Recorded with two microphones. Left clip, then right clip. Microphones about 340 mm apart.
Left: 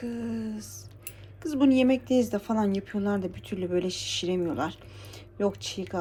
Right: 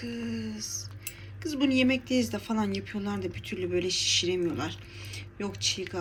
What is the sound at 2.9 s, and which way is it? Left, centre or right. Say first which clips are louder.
Speech: left 5 dB; left.